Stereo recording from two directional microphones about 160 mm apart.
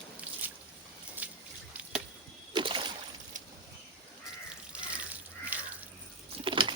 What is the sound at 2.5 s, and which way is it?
Splash, 30° right (ahead or behind).